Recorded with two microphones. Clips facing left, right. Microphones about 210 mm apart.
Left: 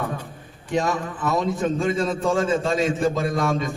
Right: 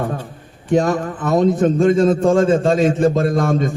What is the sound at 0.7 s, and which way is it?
A man's voice, 50° right (ahead or behind).